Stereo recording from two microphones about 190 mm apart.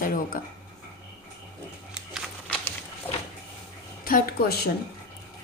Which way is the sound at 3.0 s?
10° left (ahead or behind).